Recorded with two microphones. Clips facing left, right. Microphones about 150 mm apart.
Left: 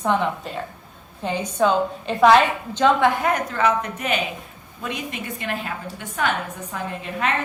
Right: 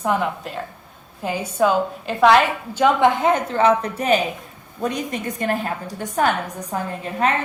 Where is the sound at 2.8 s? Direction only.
20° right (ahead or behind).